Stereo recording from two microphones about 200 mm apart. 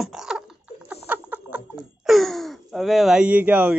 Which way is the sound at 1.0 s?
10° right (ahead or behind).